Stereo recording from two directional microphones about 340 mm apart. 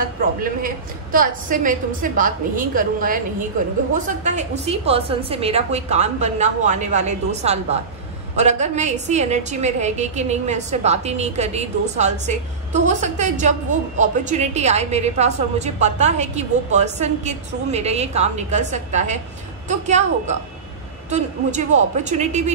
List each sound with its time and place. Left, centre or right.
0.4 s a woman's voice: right